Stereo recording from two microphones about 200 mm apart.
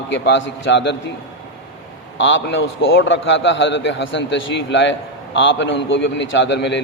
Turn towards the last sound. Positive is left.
turn(degrees=60)  # may be behind; listen again after turning